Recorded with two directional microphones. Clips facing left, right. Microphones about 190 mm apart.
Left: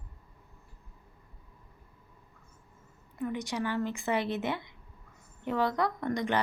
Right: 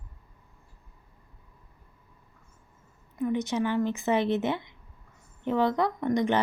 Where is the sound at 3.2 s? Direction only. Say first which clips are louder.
Right 6 dB; 20° right (ahead or behind).